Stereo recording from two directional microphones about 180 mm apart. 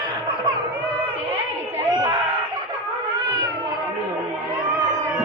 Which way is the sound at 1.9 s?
25° right (ahead or behind).